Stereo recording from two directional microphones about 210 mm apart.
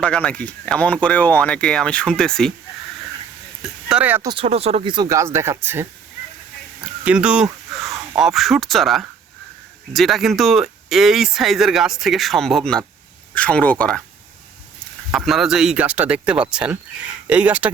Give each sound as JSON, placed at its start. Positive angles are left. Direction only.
{"t": 0.0, "sound": "speech", "side_deg": 5}
{"t": 3.8, "sound": "speech", "side_deg": -5}
{"t": 4.3, "sound": "speech", "side_deg": -25}
{"t": 7.0, "sound": "speech", "side_deg": -5}
{"t": 15.1, "sound": "speech", "side_deg": 0}